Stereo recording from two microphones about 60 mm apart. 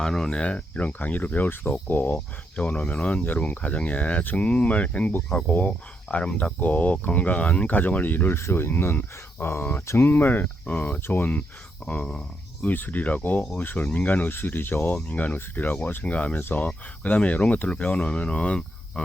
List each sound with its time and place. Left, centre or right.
0.0 s speech: centre; by 8.4 s left
8.4 s speech: left
11.9 s speech: centre
12.6 s speech: left